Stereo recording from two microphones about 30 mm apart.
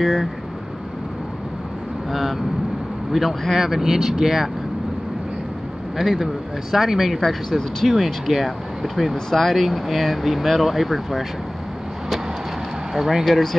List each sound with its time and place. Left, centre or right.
0.0 s speech: centre
2.0 s speech: centre
5.9 s speech: centre
7.2 s speech: centre
7.8 s speech: centre
12.9 s speech: centre